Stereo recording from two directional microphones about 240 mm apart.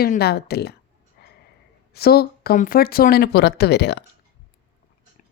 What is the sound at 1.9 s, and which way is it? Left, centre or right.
Speech, left.